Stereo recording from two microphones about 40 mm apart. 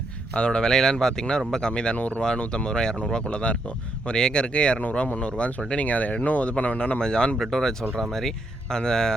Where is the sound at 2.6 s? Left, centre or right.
Centre.